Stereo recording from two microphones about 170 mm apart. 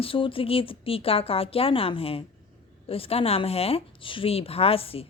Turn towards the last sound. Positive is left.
turn(degrees=35)  # may be behind; listen again after turning